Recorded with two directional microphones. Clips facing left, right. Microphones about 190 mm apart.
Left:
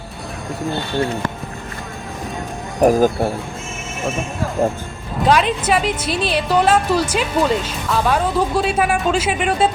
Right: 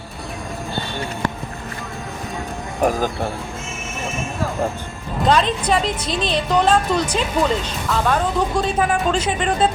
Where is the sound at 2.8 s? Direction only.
45° left (ahead or behind).